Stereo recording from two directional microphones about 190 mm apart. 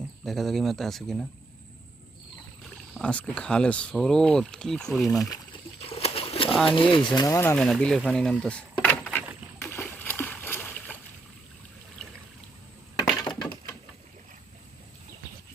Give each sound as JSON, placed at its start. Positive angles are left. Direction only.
{"t": 0.3, "sound": "speech", "side_deg": 0}
{"t": 2.6, "sound": "speech", "side_deg": 5}
{"t": 5.8, "sound": "pigeon", "side_deg": 30}
{"t": 6.7, "sound": "speech", "side_deg": 25}
{"t": 7.2, "sound": "speech", "side_deg": 15}
{"t": 7.5, "sound": "speech", "side_deg": 5}
{"t": 9.6, "sound": "splash", "side_deg": 15}